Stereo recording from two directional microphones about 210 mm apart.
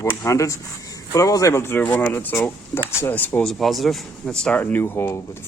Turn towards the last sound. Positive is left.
turn(degrees=10)  # may be behind; listen again after turning